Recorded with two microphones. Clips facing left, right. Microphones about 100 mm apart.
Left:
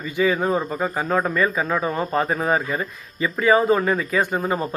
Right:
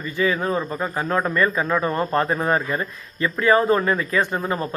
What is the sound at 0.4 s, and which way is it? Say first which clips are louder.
Speech: left 2 dB; 20° left (ahead or behind).